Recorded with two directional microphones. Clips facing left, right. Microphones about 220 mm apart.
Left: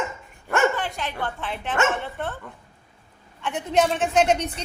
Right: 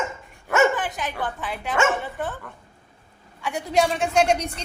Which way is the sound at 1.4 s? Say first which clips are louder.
Right 1 dB; centre (ahead or behind).